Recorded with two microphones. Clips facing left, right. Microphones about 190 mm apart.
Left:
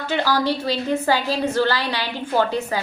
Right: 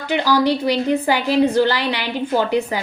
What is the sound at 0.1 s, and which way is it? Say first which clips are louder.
A woman's voice: right 4 dB; 15° right (ahead or behind).